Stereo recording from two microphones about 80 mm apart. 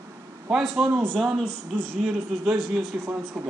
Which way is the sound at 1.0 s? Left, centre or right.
Centre.